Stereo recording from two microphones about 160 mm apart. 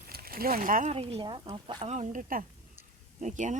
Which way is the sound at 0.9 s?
35° right (ahead or behind).